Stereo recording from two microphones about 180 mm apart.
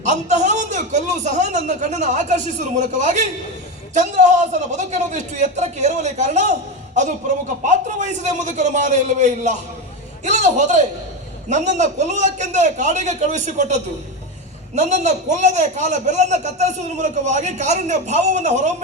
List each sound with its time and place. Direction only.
0.0 s a man's voice: 40° right (ahead or behind)
7.6 s a man's voice: 40° right (ahead or behind)